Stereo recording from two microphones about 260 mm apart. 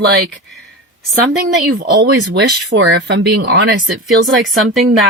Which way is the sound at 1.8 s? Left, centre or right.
Right.